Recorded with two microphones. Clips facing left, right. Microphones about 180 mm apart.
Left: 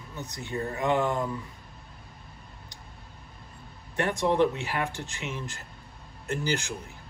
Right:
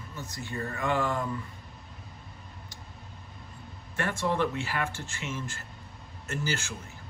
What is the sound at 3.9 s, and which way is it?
Speech, 15° left (ahead or behind).